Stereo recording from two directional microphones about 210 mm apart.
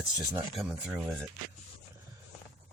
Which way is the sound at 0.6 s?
5° right (ahead or behind).